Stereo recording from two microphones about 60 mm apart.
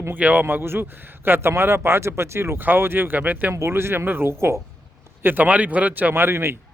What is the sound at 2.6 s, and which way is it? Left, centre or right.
Speech, right.